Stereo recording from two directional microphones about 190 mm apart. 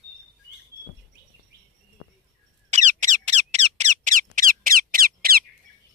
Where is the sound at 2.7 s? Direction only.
40° right (ahead or behind).